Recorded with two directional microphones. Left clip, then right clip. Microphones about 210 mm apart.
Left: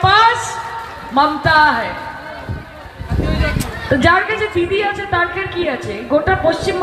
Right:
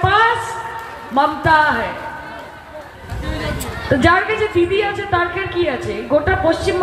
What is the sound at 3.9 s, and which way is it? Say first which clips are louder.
A woman's voice: left 1 dB; 35° right (ahead or behind).